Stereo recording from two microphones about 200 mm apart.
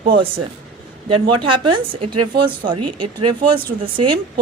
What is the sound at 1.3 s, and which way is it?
Speech, 25° right (ahead or behind).